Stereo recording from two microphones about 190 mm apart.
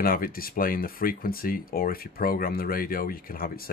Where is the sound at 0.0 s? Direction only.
50° left (ahead or behind).